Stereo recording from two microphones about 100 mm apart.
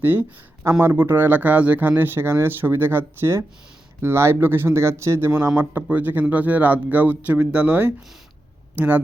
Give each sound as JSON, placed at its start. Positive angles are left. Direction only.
{"t": 0.0, "sound": "speech", "side_deg": -20}
{"t": 5.5, "sound": "speech", "side_deg": -15}